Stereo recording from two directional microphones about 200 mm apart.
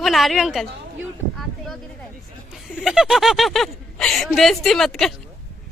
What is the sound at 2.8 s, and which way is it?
Speech, centre (ahead or behind).